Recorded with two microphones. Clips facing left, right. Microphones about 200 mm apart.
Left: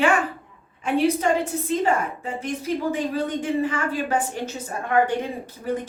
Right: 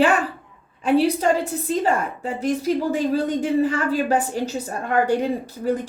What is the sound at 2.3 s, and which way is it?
A woman's voice, 35° right (ahead or behind).